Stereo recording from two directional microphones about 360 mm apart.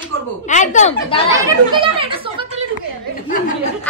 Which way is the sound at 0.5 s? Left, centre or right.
Centre.